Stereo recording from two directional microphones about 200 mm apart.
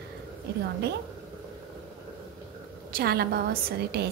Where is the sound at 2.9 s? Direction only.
50° right (ahead or behind).